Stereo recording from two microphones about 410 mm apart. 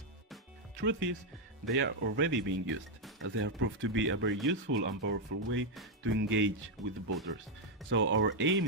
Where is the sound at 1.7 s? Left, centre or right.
Right.